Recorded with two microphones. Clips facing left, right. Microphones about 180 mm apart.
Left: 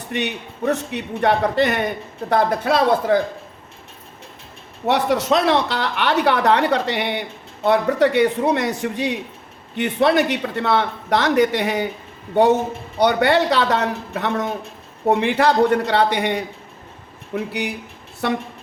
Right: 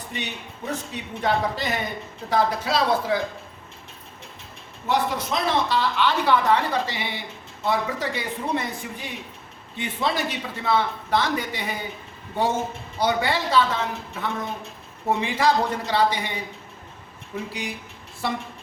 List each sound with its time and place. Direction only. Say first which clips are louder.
0.1 s speech: left 10 dB; 65° left (ahead or behind)
4.9 s a man's voice: left 7 dB; 70° left (ahead or behind)
13.0 s a man's voice: left 7 dB; 65° left (ahead or behind)
15.1 s speech: left 4 dB; 60° left (ahead or behind)